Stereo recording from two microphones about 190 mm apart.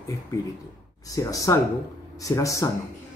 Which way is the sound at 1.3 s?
15° left (ahead or behind).